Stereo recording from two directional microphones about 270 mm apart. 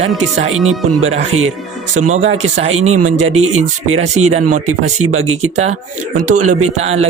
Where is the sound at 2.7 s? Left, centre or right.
Right.